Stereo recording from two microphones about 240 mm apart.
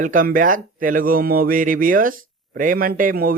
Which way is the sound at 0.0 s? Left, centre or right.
Right.